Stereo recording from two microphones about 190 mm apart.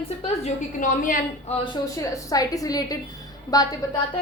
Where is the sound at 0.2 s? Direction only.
40° left (ahead or behind).